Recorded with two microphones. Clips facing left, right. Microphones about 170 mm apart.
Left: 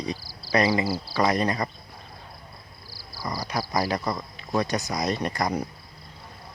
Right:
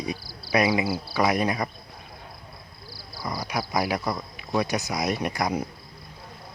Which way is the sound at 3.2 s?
Centre (ahead or behind).